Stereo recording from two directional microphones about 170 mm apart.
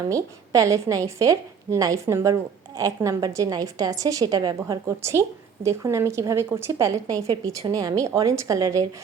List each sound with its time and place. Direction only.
0.1 s a woman's voice: 20° right (ahead or behind)